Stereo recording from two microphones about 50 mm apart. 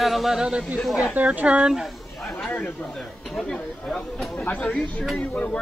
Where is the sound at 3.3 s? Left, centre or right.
Centre.